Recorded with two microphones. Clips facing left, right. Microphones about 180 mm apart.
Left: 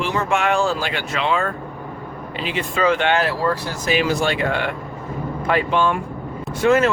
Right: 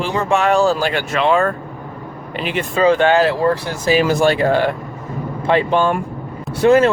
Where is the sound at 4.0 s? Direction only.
45° right (ahead or behind).